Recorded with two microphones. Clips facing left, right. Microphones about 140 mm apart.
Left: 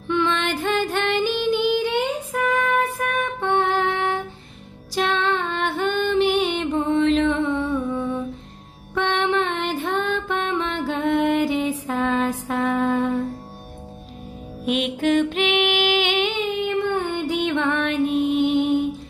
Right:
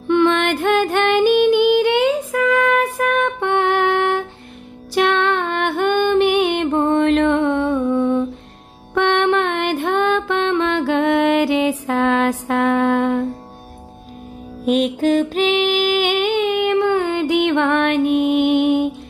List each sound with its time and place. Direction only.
0.1 s music: 60° right (ahead or behind); by 13.3 s 75° right (ahead or behind)
14.7 s music: 40° right (ahead or behind)
16.4 s music: 80° right